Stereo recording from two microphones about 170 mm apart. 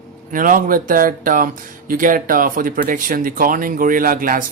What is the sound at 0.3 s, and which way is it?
Speech, 55° right (ahead or behind).